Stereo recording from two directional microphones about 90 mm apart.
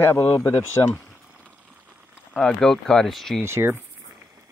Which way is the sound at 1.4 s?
15° right (ahead or behind).